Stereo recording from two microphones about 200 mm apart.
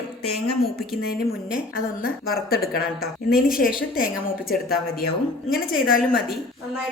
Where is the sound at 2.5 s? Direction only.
50° left (ahead or behind).